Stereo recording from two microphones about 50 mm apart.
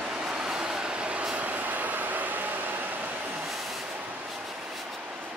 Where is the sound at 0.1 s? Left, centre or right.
Centre; by 3.4 s right.